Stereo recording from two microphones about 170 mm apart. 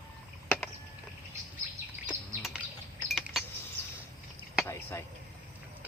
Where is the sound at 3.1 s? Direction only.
Centre (ahead or behind).